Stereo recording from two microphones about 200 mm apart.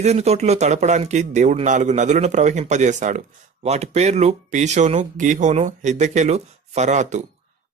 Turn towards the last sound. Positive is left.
turn(degrees=-35)  # may be behind; listen again after turning